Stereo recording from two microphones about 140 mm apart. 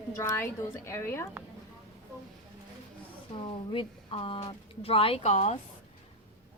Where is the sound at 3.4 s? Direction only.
40° left (ahead or behind).